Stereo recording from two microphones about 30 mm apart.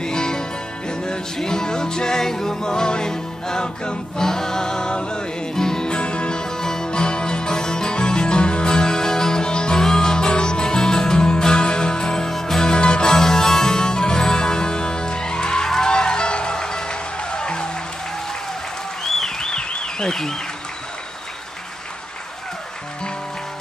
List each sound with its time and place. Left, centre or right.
0.0 s music: left
5.9 s music: left
6.9 s music: left
12.3 s music: centre
12.6 s music: left
13.1 s music: centre
13.7 s music: left
19.0 s applause: centre
19.7 s a sound: left